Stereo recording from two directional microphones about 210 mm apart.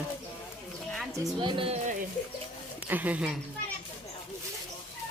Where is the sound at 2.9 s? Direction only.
10° right (ahead or behind).